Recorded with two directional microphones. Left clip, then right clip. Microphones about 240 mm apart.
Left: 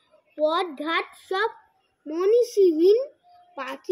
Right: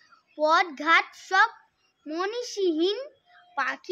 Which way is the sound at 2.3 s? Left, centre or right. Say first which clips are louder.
Left 12 dB; right.